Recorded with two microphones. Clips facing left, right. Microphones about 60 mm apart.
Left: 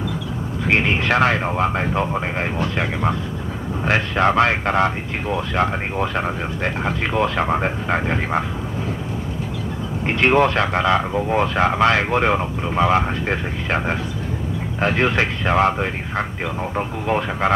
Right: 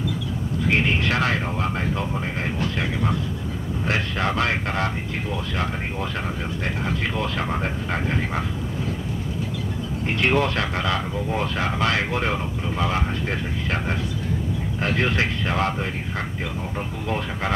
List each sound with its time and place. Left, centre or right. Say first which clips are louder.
0.7 s speech: left 3 dB; left
1.1 s speech: left 6 dB; left
2.6 s speech: left 3 dB; left
10.3 s speech: left 6 dB; left
11.1 s speech: left 7 dB; left